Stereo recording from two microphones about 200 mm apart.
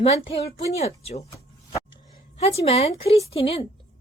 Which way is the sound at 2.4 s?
30° left (ahead or behind).